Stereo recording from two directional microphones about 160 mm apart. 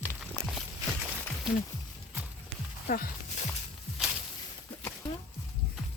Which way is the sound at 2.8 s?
65° left (ahead or behind).